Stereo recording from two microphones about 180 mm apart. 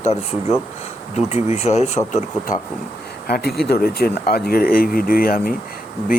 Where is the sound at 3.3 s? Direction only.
60° left (ahead or behind).